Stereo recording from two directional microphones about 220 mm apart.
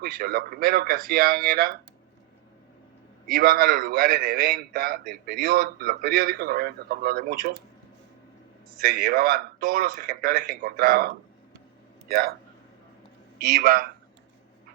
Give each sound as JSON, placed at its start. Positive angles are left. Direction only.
{"t": 0.0, "sound": "a man's voice", "side_deg": -45}
{"t": 3.2, "sound": "a man's voice", "side_deg": -40}
{"t": 8.8, "sound": "a man's voice", "side_deg": -45}
{"t": 13.4, "sound": "a man's voice", "side_deg": -45}